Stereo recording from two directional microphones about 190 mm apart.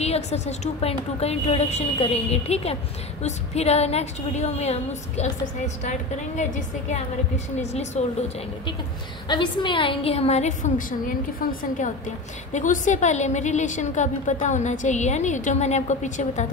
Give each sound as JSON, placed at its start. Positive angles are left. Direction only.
{"t": 0.0, "sound": "speech", "side_deg": 35}
{"t": 9.3, "sound": "speech", "side_deg": 25}